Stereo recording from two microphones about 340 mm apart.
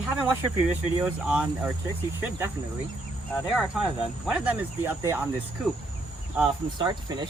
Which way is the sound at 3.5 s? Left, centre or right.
Centre.